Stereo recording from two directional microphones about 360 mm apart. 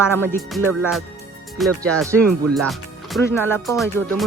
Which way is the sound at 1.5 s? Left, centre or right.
Centre.